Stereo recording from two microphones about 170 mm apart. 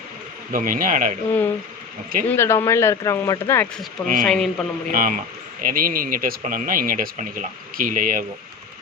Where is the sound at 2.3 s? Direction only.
15° left (ahead or behind).